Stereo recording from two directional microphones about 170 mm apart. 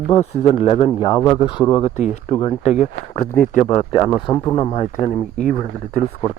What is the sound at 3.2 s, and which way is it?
Speech, 55° left (ahead or behind).